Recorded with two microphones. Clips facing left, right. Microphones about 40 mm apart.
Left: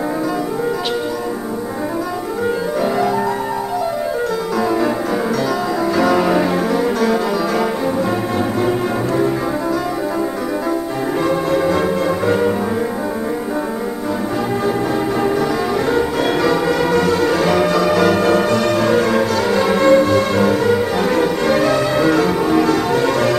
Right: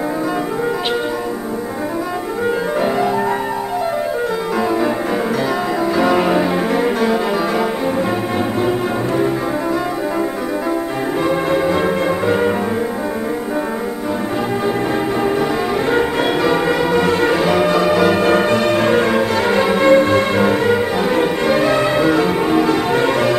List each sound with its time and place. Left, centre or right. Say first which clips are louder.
2.8 s music: left 1 dB; centre
5.9 s music: even; right
11.2 s music: even; centre
15.9 s music: right 2 dB; right
16.3 s change ringing: even; right
17.0 s music: right 1 dB; right
17.4 s change ringing: even; centre
19.7 s music: even; right
21.2 s change ringing: even; right